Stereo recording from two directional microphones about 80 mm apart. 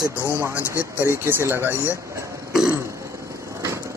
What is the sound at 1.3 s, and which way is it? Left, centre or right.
Speech, right.